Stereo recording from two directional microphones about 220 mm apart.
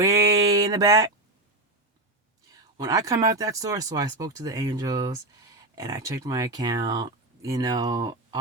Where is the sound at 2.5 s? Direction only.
15° right (ahead or behind).